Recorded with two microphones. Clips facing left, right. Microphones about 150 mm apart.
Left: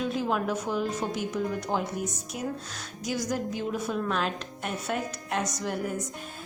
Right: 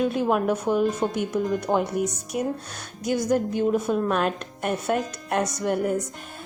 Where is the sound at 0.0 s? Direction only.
55° right (ahead or behind).